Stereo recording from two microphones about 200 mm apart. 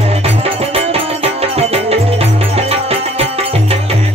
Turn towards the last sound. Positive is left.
turn(degrees=-30)  # may be behind; listen again after turning